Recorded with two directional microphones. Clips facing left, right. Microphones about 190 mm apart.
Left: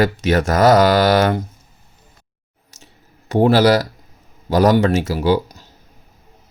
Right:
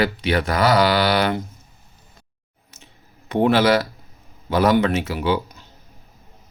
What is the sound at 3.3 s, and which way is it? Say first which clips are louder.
Speech: left 3 dB; 40° left (ahead or behind).